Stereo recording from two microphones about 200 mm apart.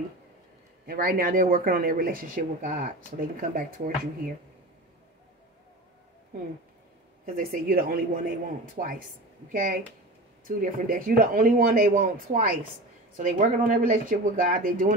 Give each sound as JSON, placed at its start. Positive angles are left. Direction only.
{"t": 0.8, "sound": "speech", "side_deg": -45}
{"t": 7.3, "sound": "speech", "side_deg": -45}